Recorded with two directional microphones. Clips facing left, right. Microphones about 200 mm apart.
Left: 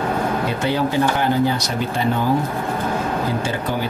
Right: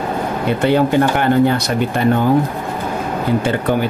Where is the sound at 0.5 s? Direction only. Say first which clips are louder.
Right 6 dB; 60° right (ahead or behind).